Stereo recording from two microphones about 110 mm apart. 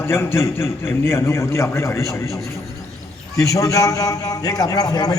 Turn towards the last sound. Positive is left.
turn(degrees=35)  # may be behind; listen again after turning